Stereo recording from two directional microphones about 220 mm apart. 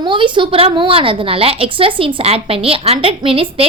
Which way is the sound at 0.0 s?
20° right (ahead or behind).